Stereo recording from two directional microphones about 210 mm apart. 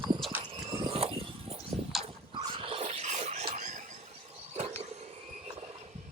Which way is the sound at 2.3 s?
25° right (ahead or behind).